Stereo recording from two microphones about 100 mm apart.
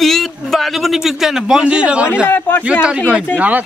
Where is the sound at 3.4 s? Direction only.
15° right (ahead or behind).